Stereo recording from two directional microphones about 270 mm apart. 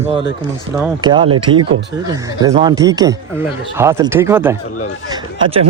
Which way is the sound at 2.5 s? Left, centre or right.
Centre.